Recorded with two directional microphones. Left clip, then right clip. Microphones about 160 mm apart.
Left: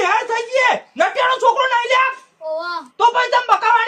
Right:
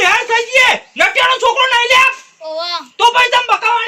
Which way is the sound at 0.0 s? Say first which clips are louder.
Right 5 dB; 5° left (ahead or behind).